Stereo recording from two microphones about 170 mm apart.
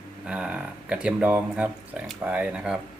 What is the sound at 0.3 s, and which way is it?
Speech, 5° right (ahead or behind).